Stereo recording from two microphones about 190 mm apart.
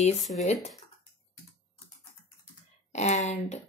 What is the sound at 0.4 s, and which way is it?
Speech, 35° left (ahead or behind).